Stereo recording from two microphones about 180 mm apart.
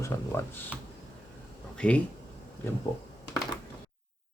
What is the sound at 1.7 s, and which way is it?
Speech, 5° left (ahead or behind).